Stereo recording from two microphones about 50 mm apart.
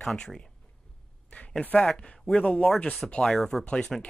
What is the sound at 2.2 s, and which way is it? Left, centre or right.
Speech, centre.